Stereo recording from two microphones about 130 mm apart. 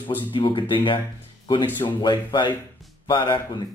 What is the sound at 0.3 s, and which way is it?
Speech, 40° left (ahead or behind).